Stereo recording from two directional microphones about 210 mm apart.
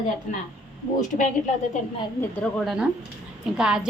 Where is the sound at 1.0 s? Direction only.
35° left (ahead or behind).